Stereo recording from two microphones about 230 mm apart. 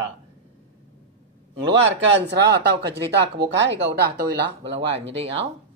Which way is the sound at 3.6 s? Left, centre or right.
Right.